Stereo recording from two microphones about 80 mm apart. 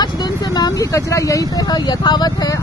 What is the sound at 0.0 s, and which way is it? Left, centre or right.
Speech, left.